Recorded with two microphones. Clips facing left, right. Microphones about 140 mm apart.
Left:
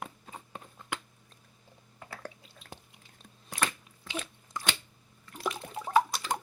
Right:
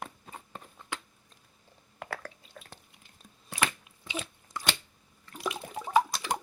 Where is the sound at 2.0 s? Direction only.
85° right.